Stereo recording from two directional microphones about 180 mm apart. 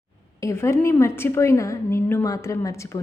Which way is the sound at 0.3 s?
15° left (ahead or behind).